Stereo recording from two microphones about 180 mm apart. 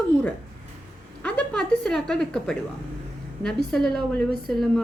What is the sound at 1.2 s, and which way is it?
A woman's voice, 5° left (ahead or behind).